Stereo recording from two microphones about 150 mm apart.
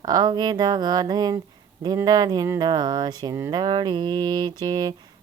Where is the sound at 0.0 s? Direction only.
30° right (ahead or behind).